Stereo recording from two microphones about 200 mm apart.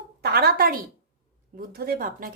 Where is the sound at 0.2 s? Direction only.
50° right (ahead or behind).